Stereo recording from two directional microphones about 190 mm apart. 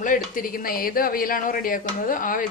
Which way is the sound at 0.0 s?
45° left (ahead or behind).